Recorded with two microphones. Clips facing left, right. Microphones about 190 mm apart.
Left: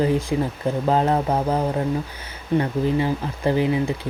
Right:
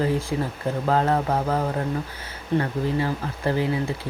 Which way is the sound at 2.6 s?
20° left (ahead or behind).